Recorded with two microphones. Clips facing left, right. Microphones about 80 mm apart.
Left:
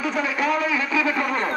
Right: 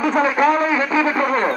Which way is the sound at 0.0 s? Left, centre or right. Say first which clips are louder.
Right 8 dB; right.